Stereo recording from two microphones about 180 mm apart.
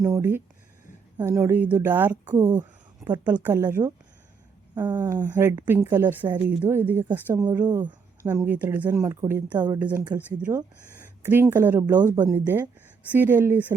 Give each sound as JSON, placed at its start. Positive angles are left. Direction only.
{"t": 0.0, "sound": "a woman's voice", "side_deg": -15}
{"t": 10.5, "sound": "speech", "side_deg": -25}
{"t": 11.2, "sound": "a woman's voice", "side_deg": -10}